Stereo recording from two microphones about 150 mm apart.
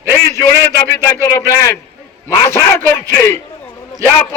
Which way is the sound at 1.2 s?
20° left (ahead or behind).